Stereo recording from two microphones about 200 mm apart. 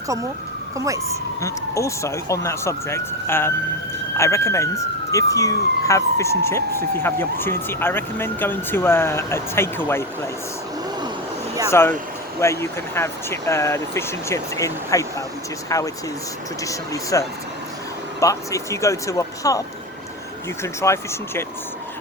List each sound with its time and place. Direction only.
1.4 s speech: 15° left (ahead or behind)
11.7 s speech: 10° left (ahead or behind)